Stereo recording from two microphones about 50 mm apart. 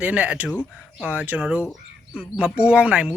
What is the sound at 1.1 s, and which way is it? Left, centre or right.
Speech, right.